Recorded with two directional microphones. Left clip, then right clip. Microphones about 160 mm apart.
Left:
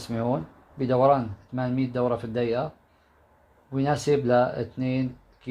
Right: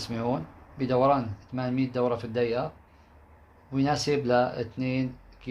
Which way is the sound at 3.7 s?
60° left (ahead or behind).